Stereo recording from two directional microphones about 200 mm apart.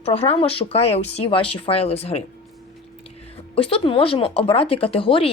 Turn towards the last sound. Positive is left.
turn(degrees=25)  # may be behind; listen again after turning